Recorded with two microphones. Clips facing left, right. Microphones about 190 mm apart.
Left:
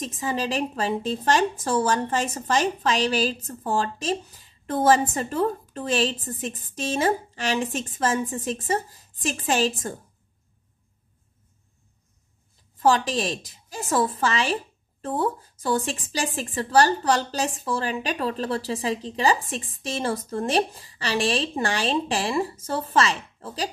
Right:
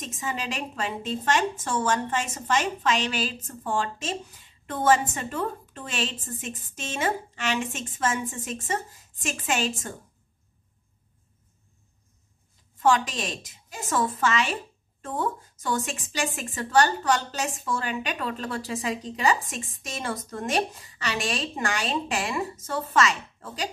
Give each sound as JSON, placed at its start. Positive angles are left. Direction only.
{"t": 0.0, "sound": "a woman's voice", "side_deg": 35}
{"t": 12.8, "sound": "a woman's voice", "side_deg": 35}